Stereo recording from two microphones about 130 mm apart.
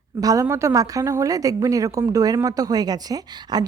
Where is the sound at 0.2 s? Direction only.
25° right (ahead or behind).